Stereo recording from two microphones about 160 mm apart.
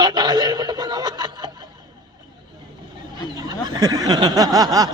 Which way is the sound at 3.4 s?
25° right (ahead or behind).